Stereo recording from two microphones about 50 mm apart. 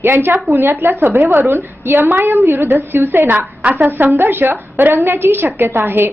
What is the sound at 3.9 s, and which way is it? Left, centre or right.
A woman's voice, right.